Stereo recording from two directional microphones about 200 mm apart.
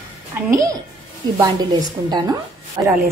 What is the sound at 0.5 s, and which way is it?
A woman's voice, 15° right (ahead or behind).